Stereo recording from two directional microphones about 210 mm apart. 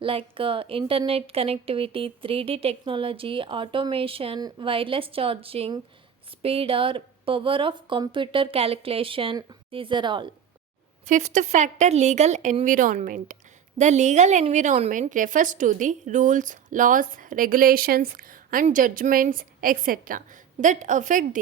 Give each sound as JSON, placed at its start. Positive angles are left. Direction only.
{"t": 0.0, "sound": "speech", "side_deg": -25}
{"t": 11.0, "sound": "a woman's voice", "side_deg": -35}